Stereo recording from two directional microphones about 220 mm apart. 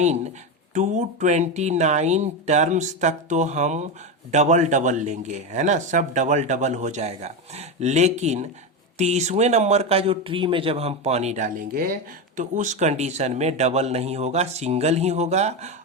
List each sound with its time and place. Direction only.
0.7 s speech: 35° right (ahead or behind)